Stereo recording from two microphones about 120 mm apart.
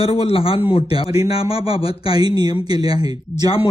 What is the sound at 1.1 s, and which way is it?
Speech, 30° right (ahead or behind).